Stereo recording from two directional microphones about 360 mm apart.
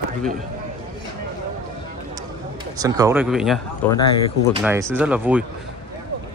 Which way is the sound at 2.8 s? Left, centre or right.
Centre.